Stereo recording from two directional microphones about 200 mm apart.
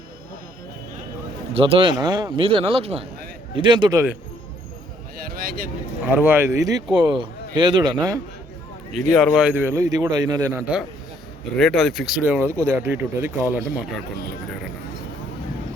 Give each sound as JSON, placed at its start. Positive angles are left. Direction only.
{"t": 1.5, "sound": "a man's voice", "side_deg": -30}
{"t": 5.1, "sound": "speech", "side_deg": -45}
{"t": 6.1, "sound": "a man's voice", "side_deg": -10}
{"t": 9.1, "sound": "speech", "side_deg": 0}
{"t": 11.5, "sound": "speech", "side_deg": 0}